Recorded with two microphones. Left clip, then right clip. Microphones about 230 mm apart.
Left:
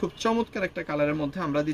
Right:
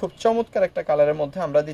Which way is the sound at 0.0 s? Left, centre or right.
Right.